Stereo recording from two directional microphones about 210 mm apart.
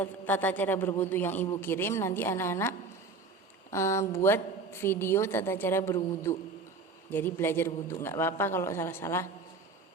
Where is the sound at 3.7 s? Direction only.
15° left (ahead or behind).